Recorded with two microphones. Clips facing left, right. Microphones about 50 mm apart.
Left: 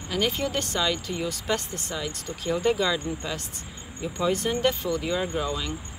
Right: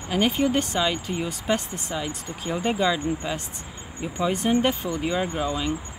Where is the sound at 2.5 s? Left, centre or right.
Right.